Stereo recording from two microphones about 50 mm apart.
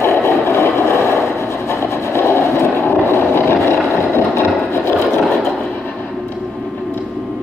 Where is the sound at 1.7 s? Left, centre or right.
Left.